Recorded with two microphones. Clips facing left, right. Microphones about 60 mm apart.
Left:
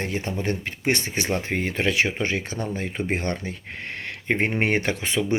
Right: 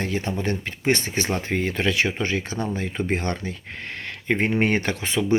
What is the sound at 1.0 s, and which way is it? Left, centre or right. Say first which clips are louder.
Speech: even; centre.